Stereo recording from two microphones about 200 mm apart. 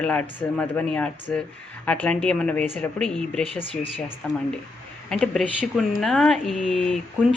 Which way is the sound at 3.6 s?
25° left (ahead or behind).